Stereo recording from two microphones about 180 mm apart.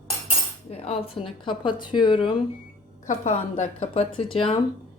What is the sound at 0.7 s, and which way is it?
A woman's voice, 30° left (ahead or behind).